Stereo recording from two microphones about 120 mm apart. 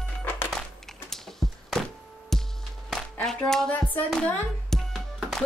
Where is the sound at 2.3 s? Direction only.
5° left (ahead or behind).